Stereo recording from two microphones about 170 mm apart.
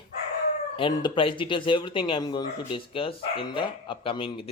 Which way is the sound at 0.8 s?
30° left (ahead or behind).